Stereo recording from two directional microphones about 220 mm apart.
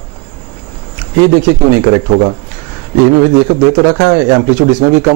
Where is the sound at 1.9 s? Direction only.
25° right (ahead or behind).